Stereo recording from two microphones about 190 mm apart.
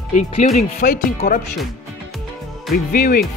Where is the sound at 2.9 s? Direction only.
50° left (ahead or behind).